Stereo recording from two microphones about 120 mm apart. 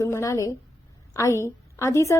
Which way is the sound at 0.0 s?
25° left (ahead or behind).